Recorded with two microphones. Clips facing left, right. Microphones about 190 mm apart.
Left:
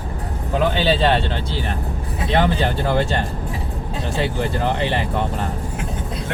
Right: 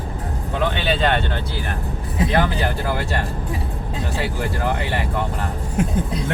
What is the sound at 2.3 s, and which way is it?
Speech, 25° left (ahead or behind).